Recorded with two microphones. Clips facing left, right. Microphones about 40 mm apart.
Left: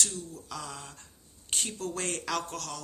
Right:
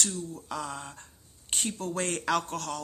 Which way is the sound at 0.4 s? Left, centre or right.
Centre.